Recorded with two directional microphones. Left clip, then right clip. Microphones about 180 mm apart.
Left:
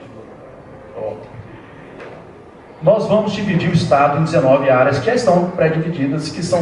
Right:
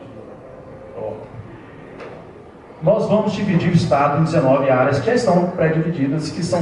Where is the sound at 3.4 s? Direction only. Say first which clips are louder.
Left 2 dB; 15° right (ahead or behind).